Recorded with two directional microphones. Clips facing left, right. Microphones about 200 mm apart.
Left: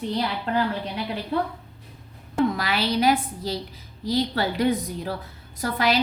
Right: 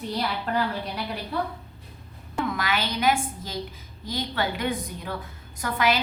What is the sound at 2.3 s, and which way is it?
A woman's voice, 35° left (ahead or behind).